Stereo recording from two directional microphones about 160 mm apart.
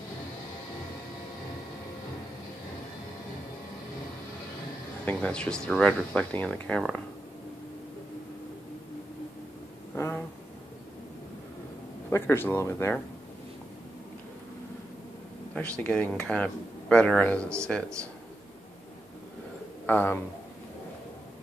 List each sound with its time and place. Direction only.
5.0 s speech: 5° left (ahead or behind)
9.9 s a sound: 15° left (ahead or behind)
12.1 s speech: 15° left (ahead or behind)
15.5 s speech: 10° left (ahead or behind)
19.9 s speech: 10° left (ahead or behind)